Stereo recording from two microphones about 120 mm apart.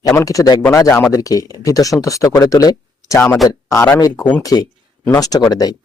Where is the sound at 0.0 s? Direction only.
30° left (ahead or behind).